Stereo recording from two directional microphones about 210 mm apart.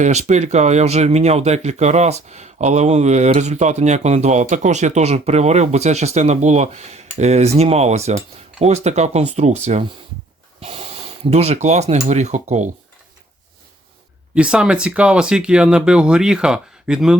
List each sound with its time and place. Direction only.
0.0 s speech: 35° right (ahead or behind)
14.3 s speech: 5° right (ahead or behind)